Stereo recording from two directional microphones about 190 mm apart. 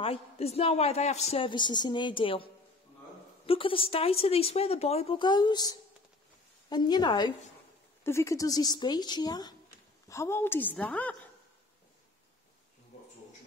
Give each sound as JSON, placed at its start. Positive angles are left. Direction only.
{"t": 0.0, "sound": "a woman's voice", "side_deg": 30}